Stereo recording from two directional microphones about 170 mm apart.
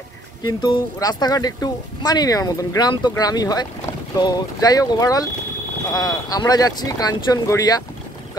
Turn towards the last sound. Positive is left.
turn(degrees=20)  # may be behind; listen again after turning